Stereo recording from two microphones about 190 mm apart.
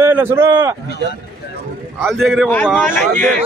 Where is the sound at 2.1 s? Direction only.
Centre (ahead or behind).